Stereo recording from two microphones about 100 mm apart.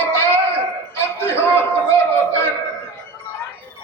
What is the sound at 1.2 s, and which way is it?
Speech, 25° left (ahead or behind).